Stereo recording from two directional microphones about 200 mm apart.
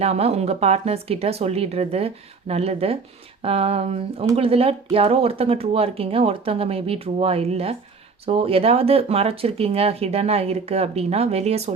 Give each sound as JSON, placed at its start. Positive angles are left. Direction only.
{"t": 0.0, "sound": "speech", "side_deg": -30}